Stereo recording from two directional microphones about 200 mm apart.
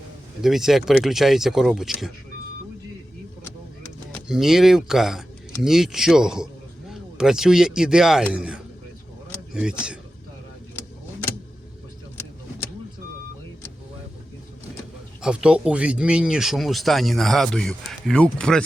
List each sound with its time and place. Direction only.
0.4 s speech: centre (ahead or behind)
4.1 s speech: centre (ahead or behind)
15.2 s speech: 5° right (ahead or behind)